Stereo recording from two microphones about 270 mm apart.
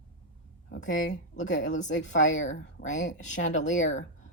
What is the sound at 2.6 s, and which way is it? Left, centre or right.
Speech, left.